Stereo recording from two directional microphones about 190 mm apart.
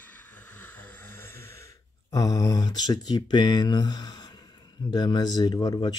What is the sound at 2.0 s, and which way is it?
Speech, 20° left (ahead or behind).